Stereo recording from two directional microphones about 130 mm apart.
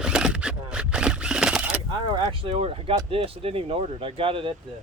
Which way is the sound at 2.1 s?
40° right (ahead or behind).